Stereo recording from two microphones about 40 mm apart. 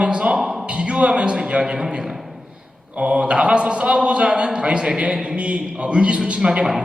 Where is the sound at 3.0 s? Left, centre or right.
Right.